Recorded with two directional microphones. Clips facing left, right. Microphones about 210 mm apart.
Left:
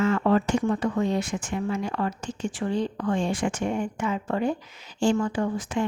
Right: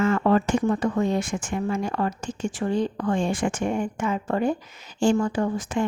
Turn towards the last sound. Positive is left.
turn(degrees=-45)  # may be behind; listen again after turning